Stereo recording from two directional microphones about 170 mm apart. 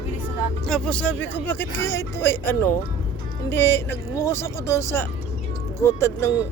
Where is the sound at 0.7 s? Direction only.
5° left (ahead or behind).